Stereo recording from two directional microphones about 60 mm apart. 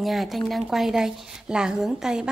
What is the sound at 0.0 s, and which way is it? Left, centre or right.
A woman's voice, centre.